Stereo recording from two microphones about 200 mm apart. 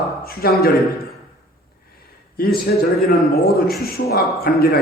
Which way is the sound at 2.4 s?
50° left (ahead or behind).